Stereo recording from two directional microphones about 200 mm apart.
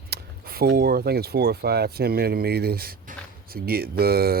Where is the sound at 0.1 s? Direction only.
50° right (ahead or behind).